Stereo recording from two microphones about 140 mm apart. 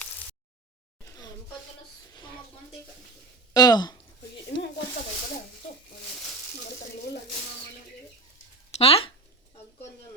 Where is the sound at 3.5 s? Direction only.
30° left (ahead or behind).